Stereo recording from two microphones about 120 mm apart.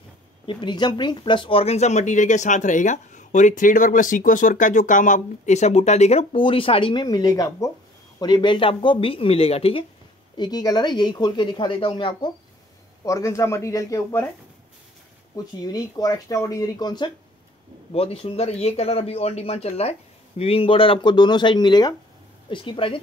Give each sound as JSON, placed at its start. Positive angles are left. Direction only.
{"t": 0.5, "sound": "speech", "side_deg": 40}
{"t": 6.3, "sound": "speech", "side_deg": 45}
{"t": 10.3, "sound": "speech", "side_deg": 35}
{"t": 13.0, "sound": "speech", "side_deg": 25}
{"t": 15.3, "sound": "speech", "side_deg": 35}
{"t": 17.9, "sound": "speech", "side_deg": 55}